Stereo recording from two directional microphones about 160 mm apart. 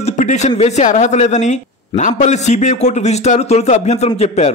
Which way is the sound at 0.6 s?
45° left (ahead or behind).